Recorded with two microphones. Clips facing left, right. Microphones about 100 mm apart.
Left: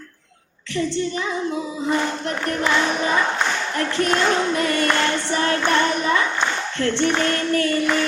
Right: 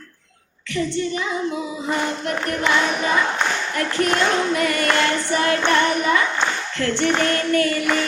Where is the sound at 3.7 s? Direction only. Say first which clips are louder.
Even; 30° left (ahead or behind).